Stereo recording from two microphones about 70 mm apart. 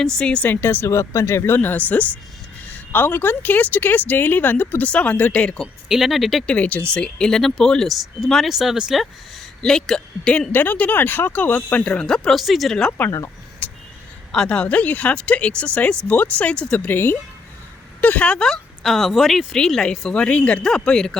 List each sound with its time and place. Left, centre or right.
0.0 s speech: centre
0.4 s speech: left
5.9 s speech: centre
6.5 s speech: centre
9.6 s speech: centre
10.5 s speech: left
11.9 s speech: centre
13.1 s speech: left
13.6 s a sound: left
14.3 s speech: centre
16.8 s speech: left
18.0 s speech: centre
18.3 s speech: centre
20.7 s speech: centre